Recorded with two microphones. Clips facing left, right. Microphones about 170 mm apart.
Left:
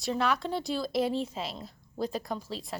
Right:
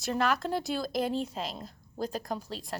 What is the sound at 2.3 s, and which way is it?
Speech, centre (ahead or behind).